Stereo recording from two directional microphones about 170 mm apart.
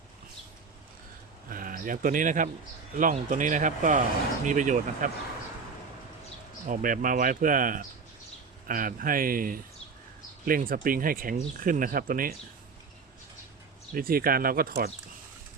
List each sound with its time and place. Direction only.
1.5 s speech: 55° right (ahead or behind)
6.7 s speech: 50° right (ahead or behind)
13.9 s speech: 60° right (ahead or behind)